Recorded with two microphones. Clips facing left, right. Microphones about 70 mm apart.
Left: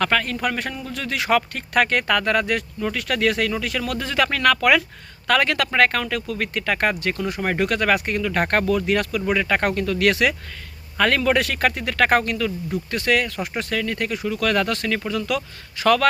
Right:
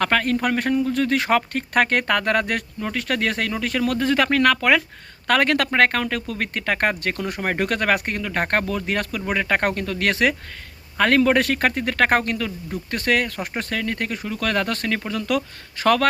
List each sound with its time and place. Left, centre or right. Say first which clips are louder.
0.0 s speech: right 1 dB; right
2.8 s speech: left 2 dB; right
5.3 s speech: right 1 dB; right